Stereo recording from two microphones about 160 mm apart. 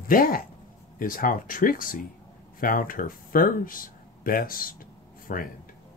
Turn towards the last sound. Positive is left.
turn(degrees=60)  # may be behind; listen again after turning